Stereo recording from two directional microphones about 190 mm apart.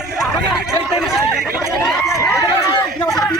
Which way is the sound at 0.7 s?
Centre (ahead or behind).